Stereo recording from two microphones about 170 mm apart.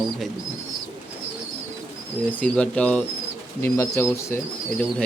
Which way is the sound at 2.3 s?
10° left (ahead or behind).